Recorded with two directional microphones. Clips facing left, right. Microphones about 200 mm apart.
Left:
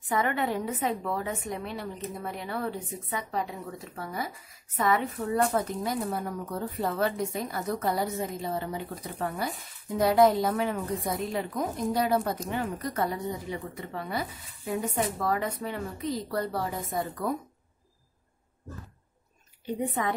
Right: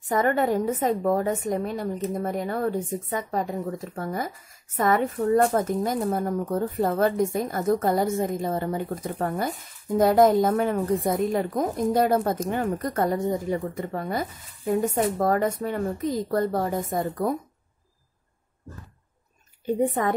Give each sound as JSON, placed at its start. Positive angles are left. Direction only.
{"t": 0.1, "sound": "a woman's voice", "side_deg": -45}
{"t": 19.6, "sound": "a woman's voice", "side_deg": -50}